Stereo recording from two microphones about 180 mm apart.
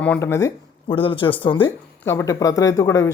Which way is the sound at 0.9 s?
30° left (ahead or behind).